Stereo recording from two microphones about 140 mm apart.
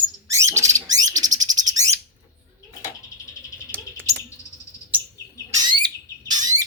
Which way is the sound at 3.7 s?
15° right (ahead or behind).